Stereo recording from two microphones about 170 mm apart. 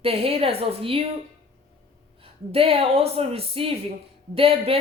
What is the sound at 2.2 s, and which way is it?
A woman's voice, 35° right (ahead or behind).